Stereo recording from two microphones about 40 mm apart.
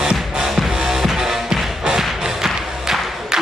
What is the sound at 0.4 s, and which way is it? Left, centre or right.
Music, centre.